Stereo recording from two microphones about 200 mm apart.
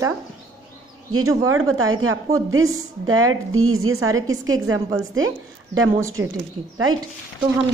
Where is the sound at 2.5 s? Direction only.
90° right.